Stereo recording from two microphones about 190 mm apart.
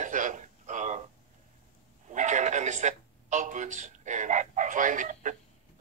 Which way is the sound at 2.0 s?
40° right (ahead or behind).